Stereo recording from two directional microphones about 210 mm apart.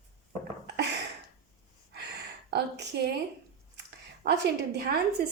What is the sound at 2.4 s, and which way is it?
Speech, 55° right (ahead or behind).